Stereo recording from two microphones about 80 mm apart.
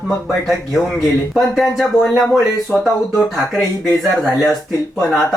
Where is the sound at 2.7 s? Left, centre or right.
Centre.